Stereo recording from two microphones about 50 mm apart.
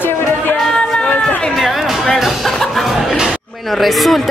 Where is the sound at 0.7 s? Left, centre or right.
Centre.